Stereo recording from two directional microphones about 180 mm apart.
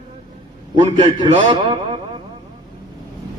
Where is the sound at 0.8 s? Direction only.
30° right (ahead or behind).